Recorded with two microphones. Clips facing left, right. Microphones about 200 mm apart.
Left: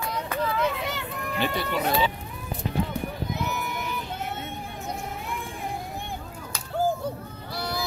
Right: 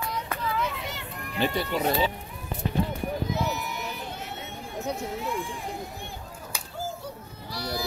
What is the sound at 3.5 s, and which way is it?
Run, 55° left (ahead or behind).